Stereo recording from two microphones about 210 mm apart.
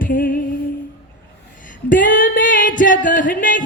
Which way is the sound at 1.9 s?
40° left (ahead or behind).